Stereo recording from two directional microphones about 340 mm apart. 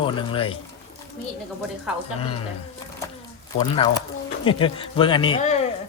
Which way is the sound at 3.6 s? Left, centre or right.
Centre.